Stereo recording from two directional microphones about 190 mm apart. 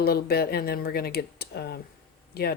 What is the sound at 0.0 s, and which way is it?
Speech, 55° left (ahead or behind).